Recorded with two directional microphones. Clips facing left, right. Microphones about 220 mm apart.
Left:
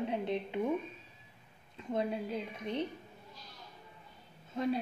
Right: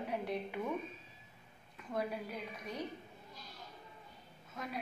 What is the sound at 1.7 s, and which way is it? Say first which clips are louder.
A woman's voice: left 5 dB; 25° left (ahead or behind).